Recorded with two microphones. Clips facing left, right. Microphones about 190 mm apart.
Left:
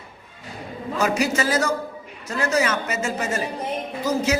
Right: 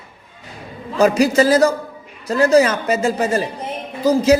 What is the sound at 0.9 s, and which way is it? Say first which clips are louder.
A man's voice: right 8 dB; 35° right (ahead or behind).